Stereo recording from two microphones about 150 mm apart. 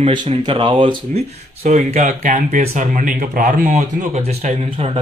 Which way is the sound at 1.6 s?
50° right (ahead or behind).